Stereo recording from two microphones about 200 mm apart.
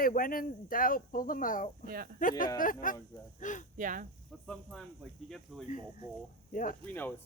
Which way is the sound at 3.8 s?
40° right (ahead or behind).